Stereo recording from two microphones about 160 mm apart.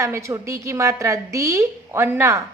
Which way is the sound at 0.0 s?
15° right (ahead or behind).